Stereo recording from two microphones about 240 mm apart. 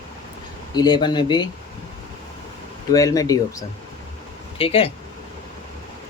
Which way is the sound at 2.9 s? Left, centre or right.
Centre.